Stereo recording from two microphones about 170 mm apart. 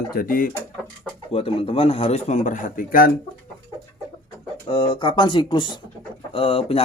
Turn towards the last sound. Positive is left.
turn(degrees=35)  # may be behind; listen again after turning